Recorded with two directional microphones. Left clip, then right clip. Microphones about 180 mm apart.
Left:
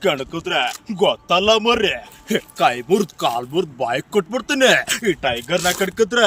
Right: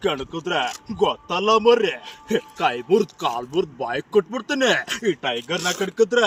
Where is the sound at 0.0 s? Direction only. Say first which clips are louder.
Left 4 dB; 35° left (ahead or behind).